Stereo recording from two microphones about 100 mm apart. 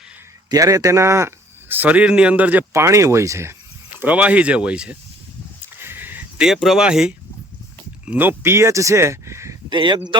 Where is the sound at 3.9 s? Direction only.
15° right (ahead or behind).